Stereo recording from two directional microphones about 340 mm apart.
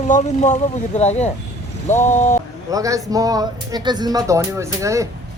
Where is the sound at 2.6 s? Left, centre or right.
Centre.